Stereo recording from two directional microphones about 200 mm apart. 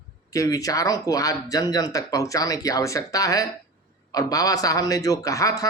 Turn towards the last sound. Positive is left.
turn(degrees=15)  # may be behind; listen again after turning